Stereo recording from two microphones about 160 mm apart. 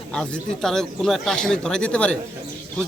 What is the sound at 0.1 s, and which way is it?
Speech, 5° left (ahead or behind).